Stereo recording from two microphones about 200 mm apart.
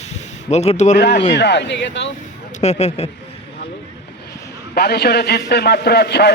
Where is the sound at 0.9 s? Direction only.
60° left (ahead or behind).